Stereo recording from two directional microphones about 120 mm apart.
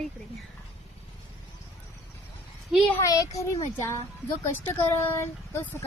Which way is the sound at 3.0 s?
30° left (ahead or behind).